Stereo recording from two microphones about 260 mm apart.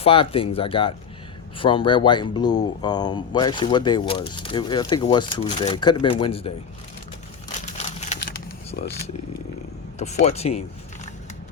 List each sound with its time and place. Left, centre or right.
0.0 s speech: left
7.6 s a sound: left
10.2 s speech: left